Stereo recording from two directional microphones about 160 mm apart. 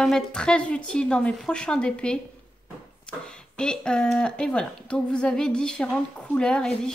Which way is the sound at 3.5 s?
5° left (ahead or behind).